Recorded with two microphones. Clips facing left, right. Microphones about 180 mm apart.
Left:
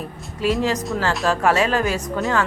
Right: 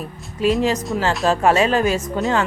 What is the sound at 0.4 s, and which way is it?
Speech, 20° right (ahead or behind).